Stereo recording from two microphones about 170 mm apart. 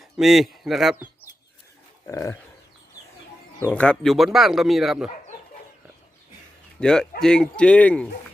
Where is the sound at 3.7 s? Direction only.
5° left (ahead or behind).